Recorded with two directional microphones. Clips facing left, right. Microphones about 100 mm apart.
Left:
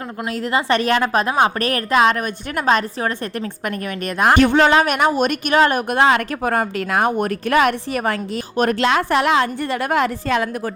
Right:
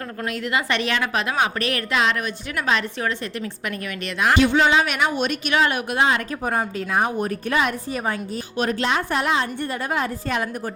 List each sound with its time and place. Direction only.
0.3 s a woman's voice: 35° left (ahead or behind); by 8.2 s 75° left (ahead or behind)
8.8 s a woman's voice: 85° left